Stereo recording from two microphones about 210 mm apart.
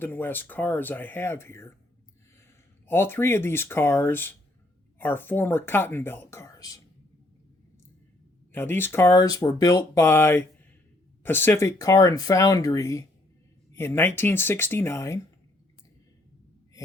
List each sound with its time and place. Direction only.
0.0 s speech: 10° left (ahead or behind)
2.9 s speech: 10° left (ahead or behind)
8.5 s speech: 10° left (ahead or behind)